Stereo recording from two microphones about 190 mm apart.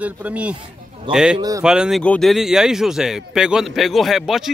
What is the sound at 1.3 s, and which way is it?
Speech, 20° right (ahead or behind).